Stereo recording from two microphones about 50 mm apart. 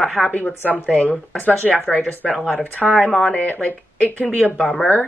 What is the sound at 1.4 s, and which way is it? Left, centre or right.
Speech, left.